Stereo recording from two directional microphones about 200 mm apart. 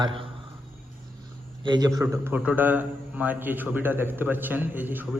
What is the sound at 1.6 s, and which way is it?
A man's voice, 20° right (ahead or behind).